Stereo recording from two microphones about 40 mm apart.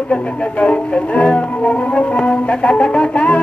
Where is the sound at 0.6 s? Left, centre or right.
Left.